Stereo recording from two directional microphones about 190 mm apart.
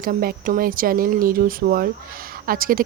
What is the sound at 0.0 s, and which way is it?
Speech, 50° right (ahead or behind).